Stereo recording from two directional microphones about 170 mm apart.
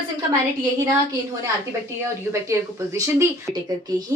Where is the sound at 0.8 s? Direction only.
20° right (ahead or behind).